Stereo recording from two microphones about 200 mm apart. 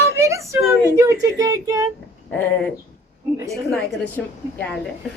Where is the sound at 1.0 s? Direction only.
15° right (ahead or behind).